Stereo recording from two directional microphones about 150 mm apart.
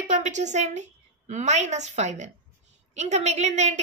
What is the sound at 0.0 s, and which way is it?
A woman's voice, 55° right (ahead or behind).